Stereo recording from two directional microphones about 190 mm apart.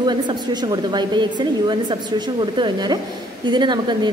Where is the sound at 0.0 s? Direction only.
25° right (ahead or behind).